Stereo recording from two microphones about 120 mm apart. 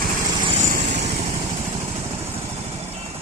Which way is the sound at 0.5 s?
75° right (ahead or behind).